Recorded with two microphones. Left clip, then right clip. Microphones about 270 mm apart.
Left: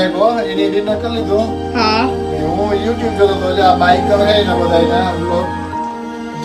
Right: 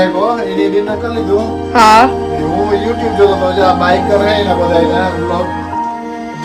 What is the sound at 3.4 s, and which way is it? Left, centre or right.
Speech, centre.